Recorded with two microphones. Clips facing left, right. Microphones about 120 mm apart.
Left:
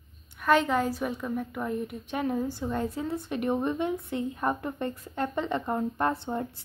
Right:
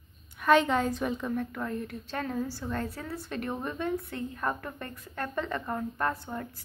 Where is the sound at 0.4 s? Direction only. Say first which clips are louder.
Even; centre (ahead or behind).